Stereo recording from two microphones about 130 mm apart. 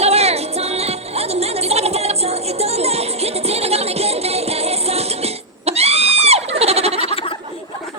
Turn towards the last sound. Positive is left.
turn(degrees=-50)  # may be behind; listen again after turning